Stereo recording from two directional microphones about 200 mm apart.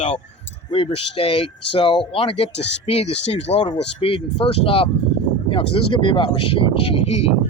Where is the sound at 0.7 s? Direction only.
30° left (ahead or behind).